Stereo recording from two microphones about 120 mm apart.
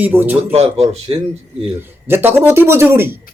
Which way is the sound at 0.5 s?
60° right (ahead or behind).